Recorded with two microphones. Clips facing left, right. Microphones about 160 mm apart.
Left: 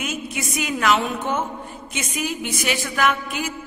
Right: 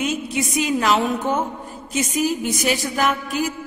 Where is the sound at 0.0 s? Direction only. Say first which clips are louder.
Right 5 dB; 30° right (ahead or behind).